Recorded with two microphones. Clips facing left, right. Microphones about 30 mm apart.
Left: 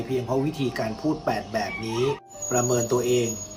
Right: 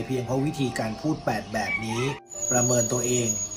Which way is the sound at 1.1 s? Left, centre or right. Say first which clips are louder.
Left 2 dB; left.